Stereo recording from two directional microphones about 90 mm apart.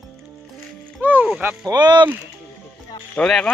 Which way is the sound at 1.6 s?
55° right (ahead or behind).